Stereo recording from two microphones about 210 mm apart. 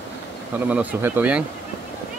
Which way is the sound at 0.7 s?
5° right (ahead or behind).